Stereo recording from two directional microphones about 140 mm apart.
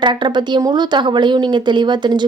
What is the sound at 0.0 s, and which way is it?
A woman's voice, 35° right (ahead or behind).